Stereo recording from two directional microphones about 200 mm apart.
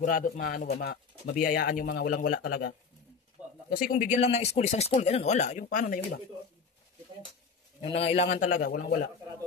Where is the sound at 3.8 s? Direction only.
40° left (ahead or behind).